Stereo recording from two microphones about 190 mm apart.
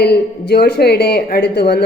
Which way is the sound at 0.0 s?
55° left (ahead or behind).